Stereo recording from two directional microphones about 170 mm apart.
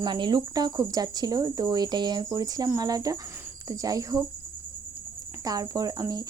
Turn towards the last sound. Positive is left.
turn(degrees=-20)  # may be behind; listen again after turning